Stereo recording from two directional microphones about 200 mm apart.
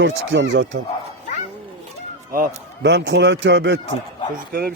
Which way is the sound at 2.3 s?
50° right (ahead or behind).